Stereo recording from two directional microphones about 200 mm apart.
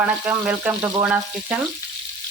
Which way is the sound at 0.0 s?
5° right (ahead or behind).